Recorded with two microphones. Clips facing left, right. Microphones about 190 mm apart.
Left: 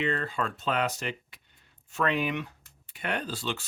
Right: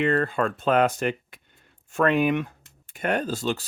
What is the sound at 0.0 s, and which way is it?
Speech, 50° right (ahead or behind).